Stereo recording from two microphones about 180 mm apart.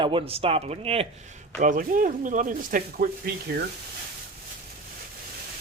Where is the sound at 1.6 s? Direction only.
50° right (ahead or behind).